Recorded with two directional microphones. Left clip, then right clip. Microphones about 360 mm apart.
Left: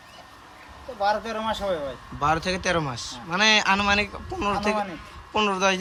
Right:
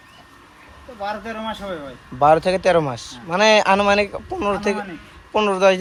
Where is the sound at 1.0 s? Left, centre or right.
Centre.